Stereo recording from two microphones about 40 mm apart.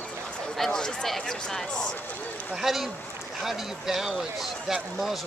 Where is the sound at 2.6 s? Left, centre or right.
Centre.